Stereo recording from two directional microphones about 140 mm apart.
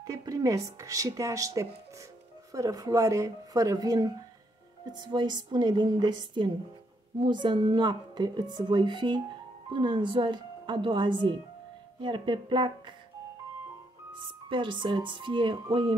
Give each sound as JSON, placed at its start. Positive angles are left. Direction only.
{"t": 0.0, "sound": "speech", "side_deg": -25}
{"t": 14.1, "sound": "speech", "side_deg": -35}